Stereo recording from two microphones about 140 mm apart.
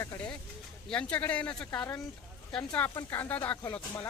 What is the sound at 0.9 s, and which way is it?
Speech, 10° left (ahead or behind).